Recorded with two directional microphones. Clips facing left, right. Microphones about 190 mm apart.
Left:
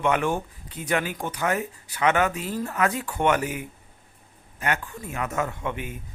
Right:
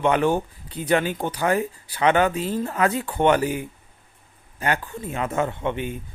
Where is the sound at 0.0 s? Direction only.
30° right (ahead or behind).